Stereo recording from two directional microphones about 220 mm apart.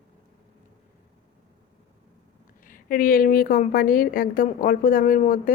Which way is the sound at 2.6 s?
40° left (ahead or behind).